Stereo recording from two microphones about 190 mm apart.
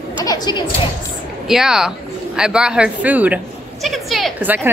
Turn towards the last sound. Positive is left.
turn(degrees=-10)  # may be behind; listen again after turning